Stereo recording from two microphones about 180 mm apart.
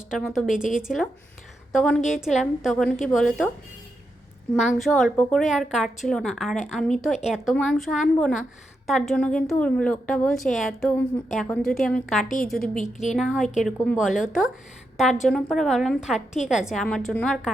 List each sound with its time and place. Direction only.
0.1 s a woman's voice: 5° right (ahead or behind)
2.0 s a woman's voice: 40° left (ahead or behind)
2.2 s a woman's voice: centre (ahead or behind)
4.6 s a woman's voice: centre (ahead or behind)